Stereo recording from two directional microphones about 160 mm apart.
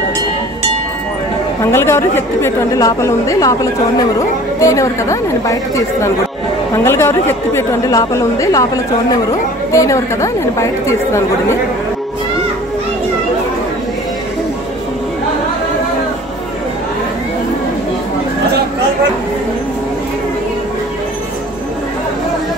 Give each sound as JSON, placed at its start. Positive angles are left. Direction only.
{"t": 1.6, "sound": "a woman's voice", "side_deg": 15}